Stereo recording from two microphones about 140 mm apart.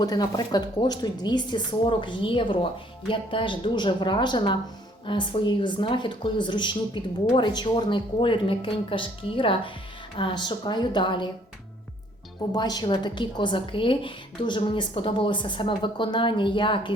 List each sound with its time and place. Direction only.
0.0 s speech: 30° left (ahead or behind)
12.5 s speech: 30° left (ahead or behind)